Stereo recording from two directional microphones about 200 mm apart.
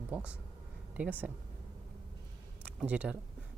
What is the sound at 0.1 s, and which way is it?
Speech, 5° right (ahead or behind).